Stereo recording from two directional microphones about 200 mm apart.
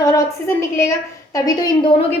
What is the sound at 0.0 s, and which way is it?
A woman's voice, 15° left (ahead or behind).